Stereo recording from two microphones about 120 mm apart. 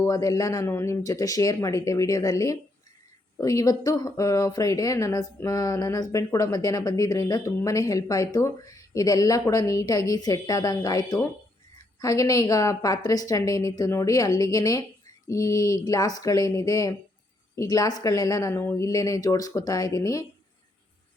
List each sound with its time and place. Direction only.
0.0 s speech: 30° left (ahead or behind)